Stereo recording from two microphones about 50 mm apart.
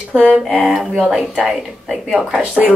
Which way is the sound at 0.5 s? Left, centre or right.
Right.